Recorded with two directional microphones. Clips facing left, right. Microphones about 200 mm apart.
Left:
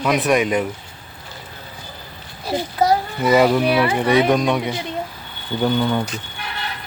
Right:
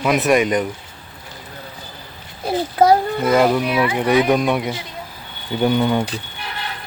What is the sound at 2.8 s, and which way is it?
Speech, 55° right (ahead or behind).